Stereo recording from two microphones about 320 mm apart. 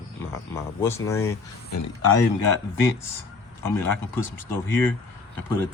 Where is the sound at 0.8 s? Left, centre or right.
Centre.